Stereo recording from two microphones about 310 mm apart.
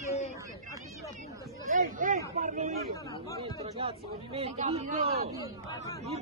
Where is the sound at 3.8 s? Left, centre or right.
Centre.